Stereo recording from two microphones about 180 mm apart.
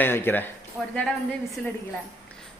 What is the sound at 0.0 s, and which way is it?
Speech, 10° left (ahead or behind).